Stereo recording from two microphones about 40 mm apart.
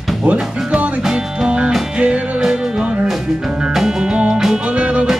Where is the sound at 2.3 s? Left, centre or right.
Centre.